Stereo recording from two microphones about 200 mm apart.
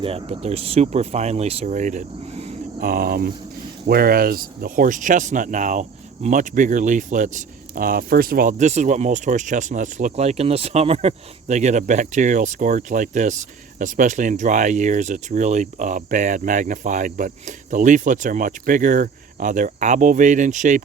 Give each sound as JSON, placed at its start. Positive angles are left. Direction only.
{"t": 0.0, "sound": "speech", "side_deg": -30}